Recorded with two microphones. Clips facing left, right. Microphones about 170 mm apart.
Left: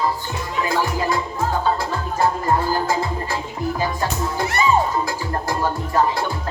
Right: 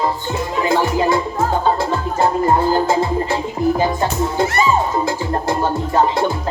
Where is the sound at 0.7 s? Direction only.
25° right (ahead or behind).